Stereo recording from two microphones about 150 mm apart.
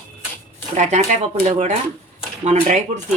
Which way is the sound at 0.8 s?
55° right (ahead or behind).